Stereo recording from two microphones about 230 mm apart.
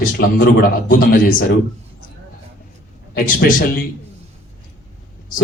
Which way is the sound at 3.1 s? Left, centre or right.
Left.